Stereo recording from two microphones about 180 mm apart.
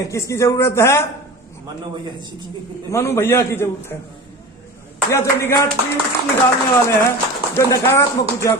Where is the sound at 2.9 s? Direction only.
15° left (ahead or behind).